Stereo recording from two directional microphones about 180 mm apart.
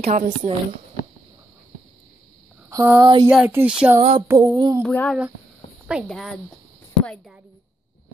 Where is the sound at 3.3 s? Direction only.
10° right (ahead or behind).